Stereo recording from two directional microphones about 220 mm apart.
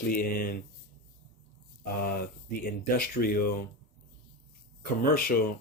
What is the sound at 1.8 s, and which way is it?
Speech, 40° left (ahead or behind).